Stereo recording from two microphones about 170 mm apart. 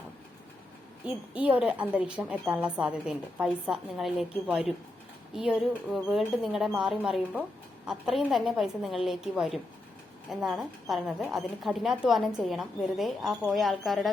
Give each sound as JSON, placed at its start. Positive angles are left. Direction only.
{"t": 1.0, "sound": "a woman's voice", "side_deg": -5}